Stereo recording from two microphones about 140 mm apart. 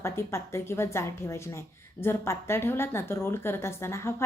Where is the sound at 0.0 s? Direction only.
20° left (ahead or behind).